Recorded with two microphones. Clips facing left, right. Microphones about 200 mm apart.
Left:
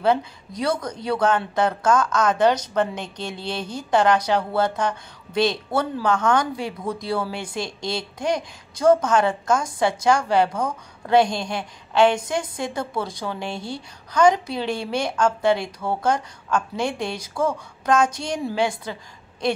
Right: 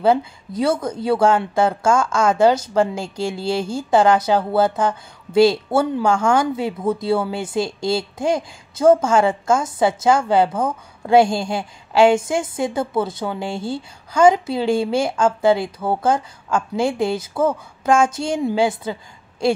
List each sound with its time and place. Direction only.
0.0 s a woman's voice: 25° right (ahead or behind)